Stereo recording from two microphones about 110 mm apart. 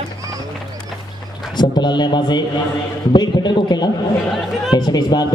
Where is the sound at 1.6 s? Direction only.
40° left (ahead or behind).